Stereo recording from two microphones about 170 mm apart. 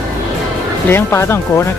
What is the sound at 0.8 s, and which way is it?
Speech, 15° left (ahead or behind).